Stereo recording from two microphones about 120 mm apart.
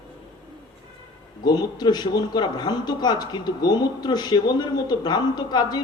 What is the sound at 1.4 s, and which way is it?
Speech, 35° left (ahead or behind).